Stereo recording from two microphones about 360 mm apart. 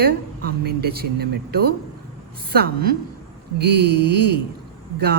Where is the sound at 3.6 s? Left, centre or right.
Right.